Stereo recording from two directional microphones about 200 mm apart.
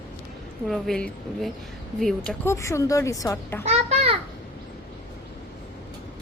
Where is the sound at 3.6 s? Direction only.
30° right (ahead or behind).